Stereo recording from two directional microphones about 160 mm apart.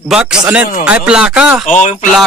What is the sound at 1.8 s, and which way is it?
Speech, 50° left (ahead or behind).